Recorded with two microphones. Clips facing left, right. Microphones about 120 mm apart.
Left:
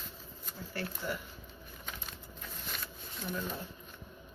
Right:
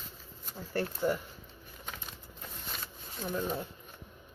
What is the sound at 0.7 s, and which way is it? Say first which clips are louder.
Speech: right 8 dB; 40° right (ahead or behind).